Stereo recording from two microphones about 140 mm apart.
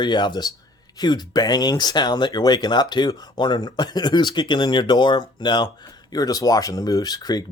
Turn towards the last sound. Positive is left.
turn(degrees=30)  # may be behind; listen again after turning